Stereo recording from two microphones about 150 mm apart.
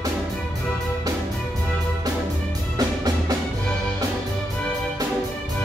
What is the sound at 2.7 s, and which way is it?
Music, 25° right (ahead or behind).